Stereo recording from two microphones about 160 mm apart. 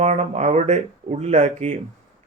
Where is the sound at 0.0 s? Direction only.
45° right (ahead or behind).